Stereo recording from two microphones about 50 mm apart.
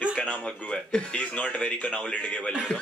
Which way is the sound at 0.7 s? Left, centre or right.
Centre.